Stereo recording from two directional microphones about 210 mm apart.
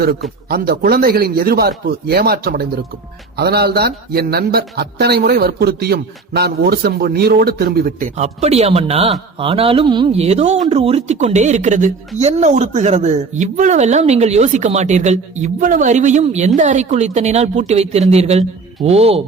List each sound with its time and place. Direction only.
0.4 s a man's voice: 45° right (ahead or behind)
8.1 s speech: 30° right (ahead or behind)